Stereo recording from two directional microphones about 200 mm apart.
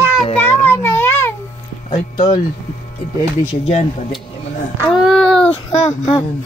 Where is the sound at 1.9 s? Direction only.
25° left (ahead or behind).